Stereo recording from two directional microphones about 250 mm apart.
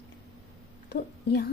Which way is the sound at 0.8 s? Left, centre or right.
Left.